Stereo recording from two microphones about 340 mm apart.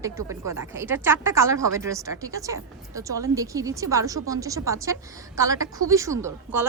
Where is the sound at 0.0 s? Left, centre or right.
Centre.